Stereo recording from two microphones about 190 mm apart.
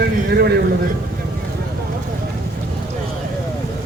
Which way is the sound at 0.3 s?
60° right (ahead or behind).